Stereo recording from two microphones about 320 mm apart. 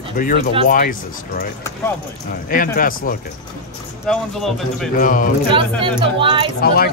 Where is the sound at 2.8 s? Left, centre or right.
Left.